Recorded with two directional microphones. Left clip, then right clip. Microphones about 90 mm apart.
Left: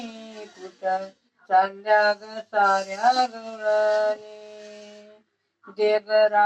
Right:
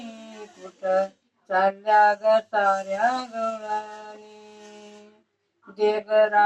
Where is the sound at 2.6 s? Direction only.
40° right (ahead or behind).